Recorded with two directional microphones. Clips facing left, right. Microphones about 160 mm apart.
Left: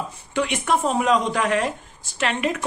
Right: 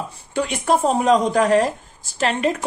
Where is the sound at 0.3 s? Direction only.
35° right (ahead or behind).